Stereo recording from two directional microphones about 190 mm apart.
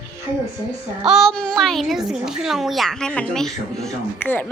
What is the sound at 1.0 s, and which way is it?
A child's voice, centre (ahead or behind).